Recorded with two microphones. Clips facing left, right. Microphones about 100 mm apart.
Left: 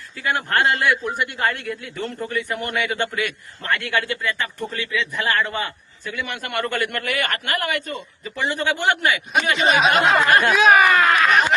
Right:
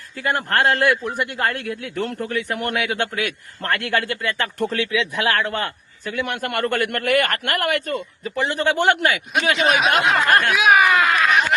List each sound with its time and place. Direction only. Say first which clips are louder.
0.2 s a man's voice: right 1 dB; 55° right (ahead or behind)
0.9 s a sound: right 1 dB; centre (ahead or behind)
1.3 s a man's voice: even; 50° right (ahead or behind)
4.6 s a man's voice: right 5 dB; 75° right (ahead or behind); by 9.2 s 50° right (ahead or behind)
9.6 s a sound: left 2 dB; centre (ahead or behind)
10.6 s speech: left 2 dB; 10° right (ahead or behind)
10.9 s speech: left 1 dB; centre (ahead or behind)